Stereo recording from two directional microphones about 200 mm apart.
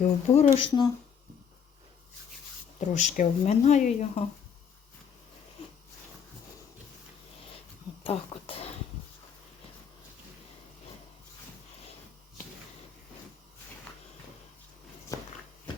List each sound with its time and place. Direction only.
0.0 s speech: 30° left (ahead or behind)
2.8 s speech: 35° left (ahead or behind)
8.0 s speech: 30° left (ahead or behind)
15.1 s walk: 15° left (ahead or behind)